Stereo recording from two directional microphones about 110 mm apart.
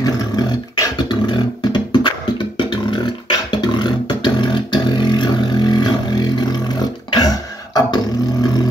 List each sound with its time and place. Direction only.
0.0 s beatboxing: 35° left (ahead or behind)
5.0 s vehicle: 40° left (ahead or behind)
7.2 s beatboxing: 35° left (ahead or behind)